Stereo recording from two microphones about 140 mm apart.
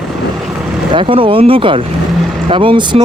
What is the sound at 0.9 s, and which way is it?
Speech, 40° right (ahead or behind).